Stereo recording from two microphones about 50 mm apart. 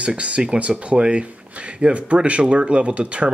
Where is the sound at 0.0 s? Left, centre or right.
Right.